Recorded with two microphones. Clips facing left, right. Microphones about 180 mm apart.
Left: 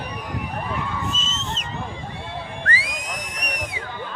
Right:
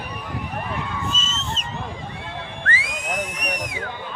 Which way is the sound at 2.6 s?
35° left (ahead or behind).